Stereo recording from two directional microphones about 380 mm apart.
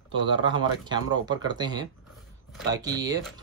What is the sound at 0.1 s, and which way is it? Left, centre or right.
Speech, centre.